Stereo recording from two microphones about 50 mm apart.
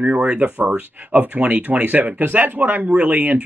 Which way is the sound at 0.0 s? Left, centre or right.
Right.